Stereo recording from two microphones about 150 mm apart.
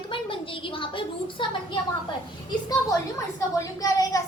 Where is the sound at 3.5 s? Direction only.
25° left (ahead or behind).